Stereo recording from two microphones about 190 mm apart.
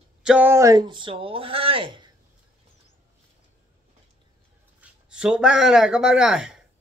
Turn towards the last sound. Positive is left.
turn(degrees=-5)  # may be behind; listen again after turning